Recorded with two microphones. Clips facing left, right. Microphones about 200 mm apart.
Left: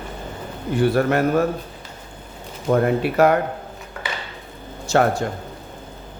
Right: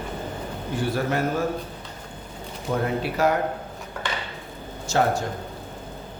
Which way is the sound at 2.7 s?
60° left (ahead or behind).